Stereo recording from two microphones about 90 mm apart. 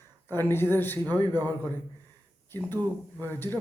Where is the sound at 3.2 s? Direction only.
25° left (ahead or behind).